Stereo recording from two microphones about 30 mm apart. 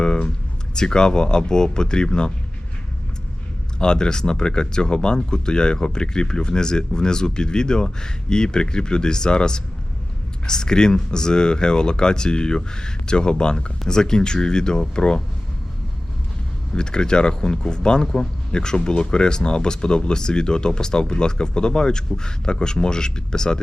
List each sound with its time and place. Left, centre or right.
0.7 s speech: left
3.8 s speech: left
16.7 s speech: left